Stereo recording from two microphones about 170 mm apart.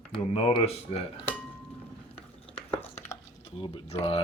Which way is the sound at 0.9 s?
35° left (ahead or behind).